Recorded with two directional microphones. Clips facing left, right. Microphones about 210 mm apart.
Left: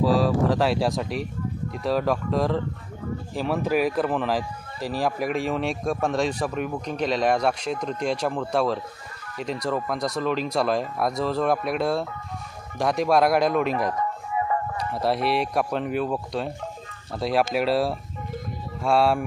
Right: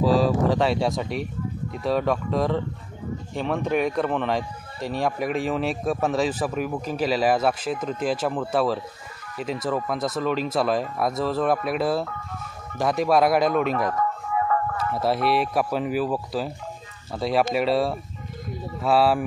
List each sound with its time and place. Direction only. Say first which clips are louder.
0.0 s speech: right 1 dB; centre (ahead or behind)
13.9 s music: right 2 dB; 20° left (ahead or behind)
14.9 s speech: right 1 dB; centre (ahead or behind)